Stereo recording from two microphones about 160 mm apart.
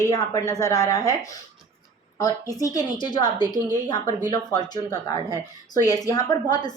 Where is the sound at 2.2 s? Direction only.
20° left (ahead or behind).